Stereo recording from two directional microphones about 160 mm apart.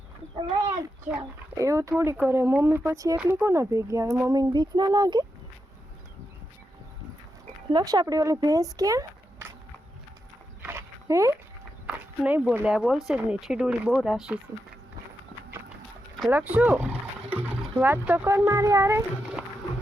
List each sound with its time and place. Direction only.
1.2 s speech: 20° right (ahead or behind)
7.7 s speech: 25° right (ahead or behind)
10.6 s dog: 15° right (ahead or behind)
11.9 s speech: 10° right (ahead or behind)
16.3 s speech: 10° right (ahead or behind)